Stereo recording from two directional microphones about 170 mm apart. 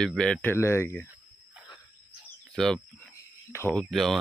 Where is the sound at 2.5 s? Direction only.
5° left (ahead or behind).